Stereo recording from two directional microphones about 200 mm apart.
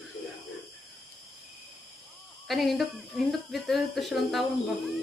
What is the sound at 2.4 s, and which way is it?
Speech, centre (ahead or behind).